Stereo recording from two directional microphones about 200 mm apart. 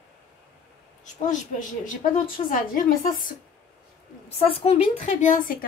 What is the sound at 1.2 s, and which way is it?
A woman's voice, 40° left (ahead or behind).